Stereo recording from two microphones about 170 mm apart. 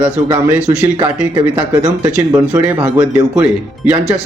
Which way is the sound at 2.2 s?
10° right (ahead or behind).